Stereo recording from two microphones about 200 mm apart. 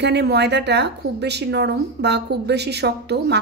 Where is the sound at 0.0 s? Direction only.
55° right (ahead or behind).